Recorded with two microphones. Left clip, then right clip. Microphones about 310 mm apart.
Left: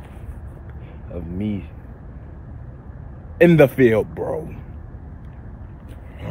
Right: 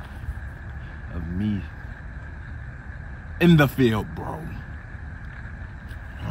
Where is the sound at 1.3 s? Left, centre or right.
Centre.